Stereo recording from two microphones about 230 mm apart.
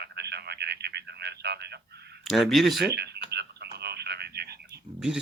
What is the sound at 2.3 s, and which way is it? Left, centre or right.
Speech, centre.